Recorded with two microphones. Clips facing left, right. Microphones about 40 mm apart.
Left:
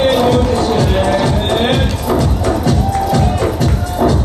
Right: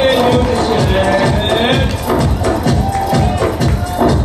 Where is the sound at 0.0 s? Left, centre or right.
Centre.